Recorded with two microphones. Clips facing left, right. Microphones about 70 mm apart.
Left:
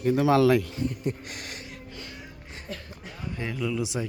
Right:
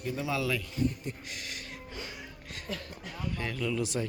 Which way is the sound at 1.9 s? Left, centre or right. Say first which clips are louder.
Even; right.